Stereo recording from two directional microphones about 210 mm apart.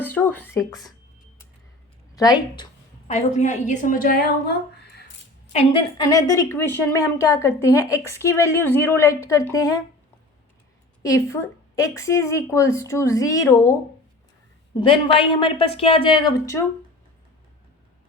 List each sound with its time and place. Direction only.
0.0 s beatboxing: 10° left (ahead or behind)
2.1 s a woman's voice: 20° left (ahead or behind)
3.1 s a woman's voice: 35° left (ahead or behind)
5.5 s a woman's voice: 25° left (ahead or behind)
11.0 s a woman's voice: 15° left (ahead or behind)
14.8 s a woman's voice: 25° left (ahead or behind)